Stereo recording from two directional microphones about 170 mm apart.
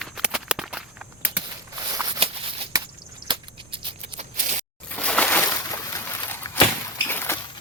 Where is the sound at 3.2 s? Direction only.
30° right (ahead or behind).